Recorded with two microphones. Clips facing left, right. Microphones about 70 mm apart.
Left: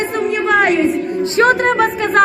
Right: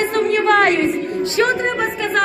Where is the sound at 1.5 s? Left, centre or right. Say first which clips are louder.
Left 6 dB; left.